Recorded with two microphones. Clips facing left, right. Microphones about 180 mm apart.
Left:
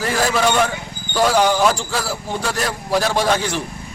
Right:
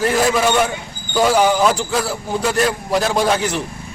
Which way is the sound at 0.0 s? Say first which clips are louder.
Right 2 dB; centre (ahead or behind).